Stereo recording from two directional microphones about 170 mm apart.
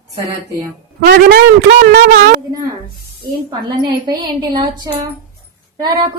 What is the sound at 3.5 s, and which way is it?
A woman's voice, 25° right (ahead or behind).